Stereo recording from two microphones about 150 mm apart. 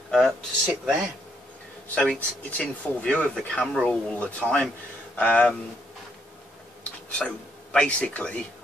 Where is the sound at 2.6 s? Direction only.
10° left (ahead or behind).